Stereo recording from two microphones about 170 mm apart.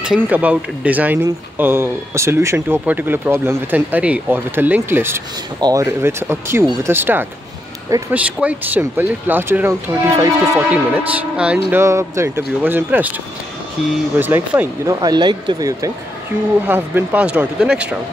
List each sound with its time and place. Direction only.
0.0 s speech: 5° right (ahead or behind)
11.3 s speech: 5° right (ahead or behind)
14.1 s speech: 10° right (ahead or behind)
16.6 s speech: 10° right (ahead or behind)